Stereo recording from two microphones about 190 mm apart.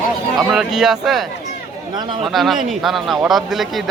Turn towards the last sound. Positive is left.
turn(degrees=0)  # may be behind; listen again after turning